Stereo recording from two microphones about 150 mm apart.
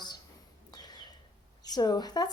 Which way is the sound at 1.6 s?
25° left (ahead or behind).